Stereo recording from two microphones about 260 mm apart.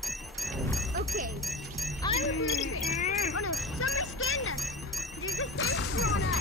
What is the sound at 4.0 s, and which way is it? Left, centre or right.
Music, left.